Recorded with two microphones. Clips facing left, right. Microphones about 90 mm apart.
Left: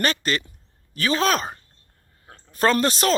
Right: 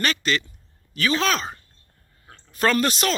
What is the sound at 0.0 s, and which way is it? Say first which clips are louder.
Speech: even; 35° left (ahead or behind).